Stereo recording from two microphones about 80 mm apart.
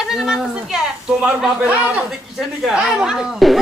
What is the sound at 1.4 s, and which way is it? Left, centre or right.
A man's voice, centre.